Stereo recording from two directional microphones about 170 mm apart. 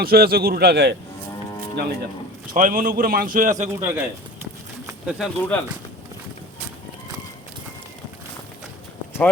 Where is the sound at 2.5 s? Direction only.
55° right (ahead or behind).